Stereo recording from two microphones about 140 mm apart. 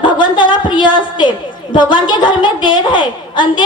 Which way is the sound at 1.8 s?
35° left (ahead or behind).